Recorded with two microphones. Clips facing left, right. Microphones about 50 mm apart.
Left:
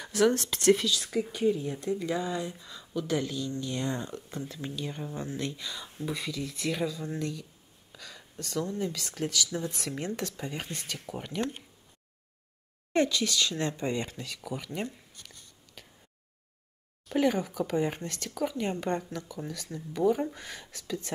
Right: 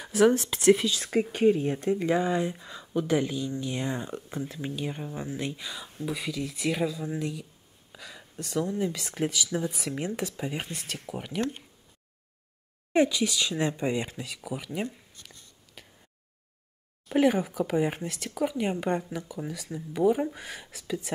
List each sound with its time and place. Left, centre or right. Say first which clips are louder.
0.0 s speech: right 3 dB; centre
0.8 s speech: right 3 dB; right; by 5.9 s centre
5.9 s speech: right 2 dB; centre
12.9 s speech: right 3 dB; centre
17.1 s speech: right 3 dB; centre